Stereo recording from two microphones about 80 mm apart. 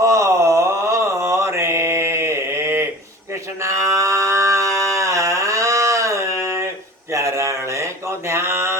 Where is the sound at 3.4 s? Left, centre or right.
Right.